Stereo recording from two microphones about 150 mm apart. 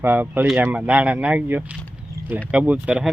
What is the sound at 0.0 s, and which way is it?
Speech, 15° right (ahead or behind).